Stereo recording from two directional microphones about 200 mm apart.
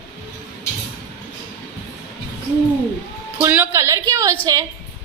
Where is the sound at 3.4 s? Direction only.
10° right (ahead or behind).